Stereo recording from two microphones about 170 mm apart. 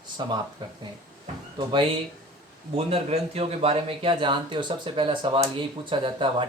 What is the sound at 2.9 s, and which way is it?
Speech, 35° right (ahead or behind).